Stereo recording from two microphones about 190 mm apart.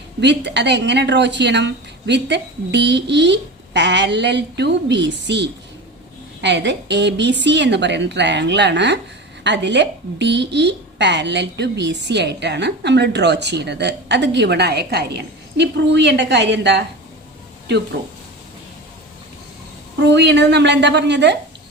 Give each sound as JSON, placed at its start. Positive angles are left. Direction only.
{"t": 0.2, "sound": "a woman's voice", "side_deg": -65}
{"t": 20.0, "sound": "a woman's voice", "side_deg": -65}